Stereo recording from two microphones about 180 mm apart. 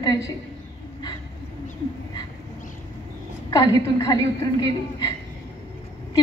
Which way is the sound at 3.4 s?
20° left (ahead or behind).